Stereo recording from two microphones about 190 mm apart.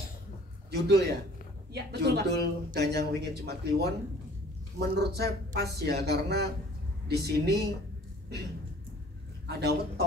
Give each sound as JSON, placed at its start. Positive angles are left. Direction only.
{"t": 0.7, "sound": "a man's voice", "side_deg": -60}
{"t": 9.5, "sound": "a man's voice", "side_deg": -60}